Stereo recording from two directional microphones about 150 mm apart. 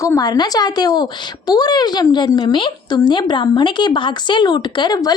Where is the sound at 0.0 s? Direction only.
25° left (ahead or behind).